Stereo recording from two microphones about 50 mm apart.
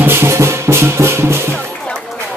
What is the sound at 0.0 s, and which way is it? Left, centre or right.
Music, right.